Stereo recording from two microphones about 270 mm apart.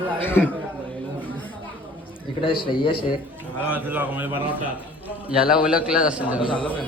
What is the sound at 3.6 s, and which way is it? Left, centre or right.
A man's voice, centre.